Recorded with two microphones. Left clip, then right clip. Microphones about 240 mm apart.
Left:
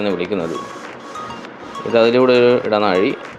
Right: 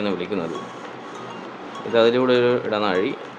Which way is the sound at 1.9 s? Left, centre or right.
Centre.